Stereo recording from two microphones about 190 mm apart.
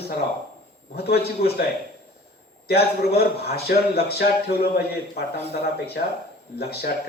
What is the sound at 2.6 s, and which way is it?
A man's voice, 55° left (ahead or behind).